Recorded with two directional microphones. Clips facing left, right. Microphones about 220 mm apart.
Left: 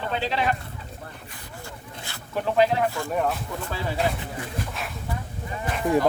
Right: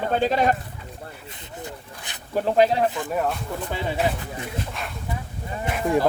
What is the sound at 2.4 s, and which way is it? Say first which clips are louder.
Speech: right 2 dB; 35° right (ahead or behind).